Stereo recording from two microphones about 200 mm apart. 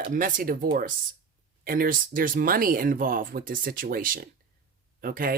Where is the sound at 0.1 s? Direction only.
40° right (ahead or behind).